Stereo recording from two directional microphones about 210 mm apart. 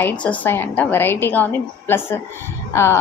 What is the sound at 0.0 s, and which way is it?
A woman's voice, 5° left (ahead or behind).